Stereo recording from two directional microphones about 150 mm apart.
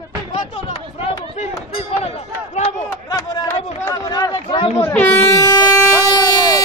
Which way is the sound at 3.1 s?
25° left (ahead or behind).